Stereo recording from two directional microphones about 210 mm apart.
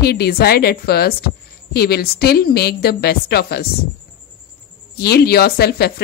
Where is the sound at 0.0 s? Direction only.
50° left (ahead or behind).